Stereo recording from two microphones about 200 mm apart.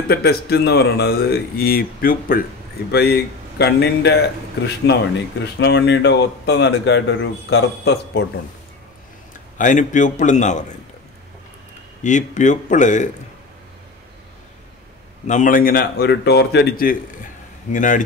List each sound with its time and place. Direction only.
0.1 s speech: 50° left (ahead or behind)
9.6 s a man's voice: 40° left (ahead or behind)
12.0 s a man's voice: 40° left (ahead or behind)
15.2 s a man's voice: 40° left (ahead or behind)